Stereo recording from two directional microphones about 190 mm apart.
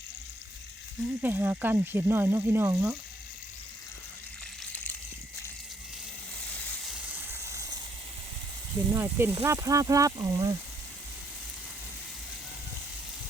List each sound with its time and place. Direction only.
1.2 s speech: 10° right (ahead or behind)
6.5 s a sound: 5° left (ahead or behind)
7.1 s vehicle: 10° right (ahead or behind)
8.9 s speech: 15° right (ahead or behind)